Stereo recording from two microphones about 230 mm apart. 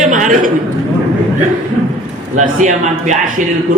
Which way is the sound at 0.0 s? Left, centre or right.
Right.